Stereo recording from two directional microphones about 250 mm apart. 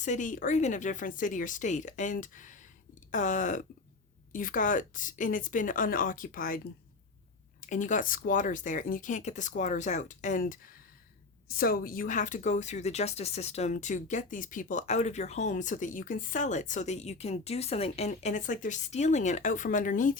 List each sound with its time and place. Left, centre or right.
0.0 s speech: left
7.7 s a woman's voice: left